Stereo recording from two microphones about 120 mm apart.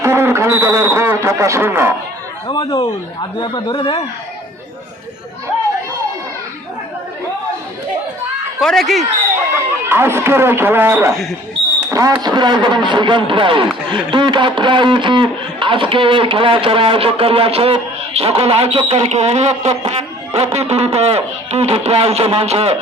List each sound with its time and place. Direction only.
0.0 s speech: 20° right (ahead or behind)
2.5 s speech: 40° left (ahead or behind)
8.6 s speech: centre (ahead or behind)
9.9 s speech: 20° right (ahead or behind)
11.1 s speech: centre (ahead or behind)
11.9 s speech: 30° right (ahead or behind); by 22.8 s 55° right (ahead or behind)